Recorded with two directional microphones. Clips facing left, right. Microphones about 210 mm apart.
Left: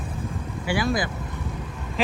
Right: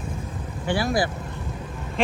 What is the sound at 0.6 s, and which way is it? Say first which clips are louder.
Speech: right 1 dB; 15° left (ahead or behind).